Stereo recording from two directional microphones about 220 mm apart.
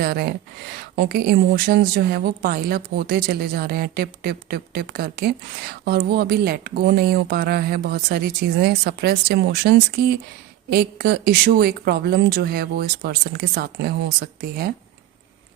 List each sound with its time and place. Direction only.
0.0 s speech: 45° right (ahead or behind)